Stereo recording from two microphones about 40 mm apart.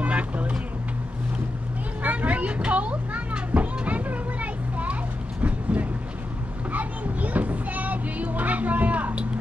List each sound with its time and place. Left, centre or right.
0.0 s vehicle: right
2.0 s children playing: right
5.4 s vehicle: right
6.7 s children playing: right